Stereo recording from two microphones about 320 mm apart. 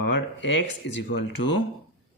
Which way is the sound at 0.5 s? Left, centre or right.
Left.